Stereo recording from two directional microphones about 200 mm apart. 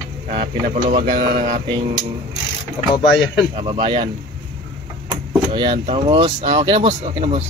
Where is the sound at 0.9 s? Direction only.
30° right (ahead or behind).